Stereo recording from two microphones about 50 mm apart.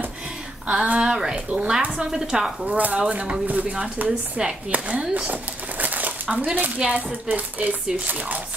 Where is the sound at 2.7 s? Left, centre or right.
Right.